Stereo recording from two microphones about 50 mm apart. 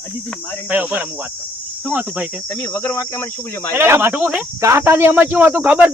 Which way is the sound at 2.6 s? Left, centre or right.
Left.